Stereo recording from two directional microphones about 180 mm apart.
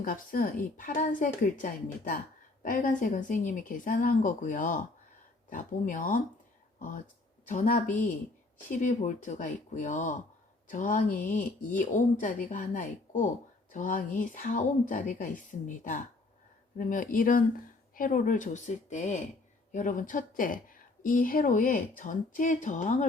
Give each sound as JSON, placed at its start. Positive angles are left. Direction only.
{"t": 0.0, "sound": "speech", "side_deg": 50}